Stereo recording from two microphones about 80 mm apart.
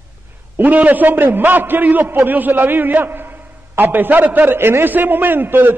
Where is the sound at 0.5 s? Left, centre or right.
Right.